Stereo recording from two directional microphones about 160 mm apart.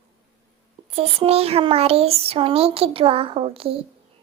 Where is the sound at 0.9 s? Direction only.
40° right (ahead or behind).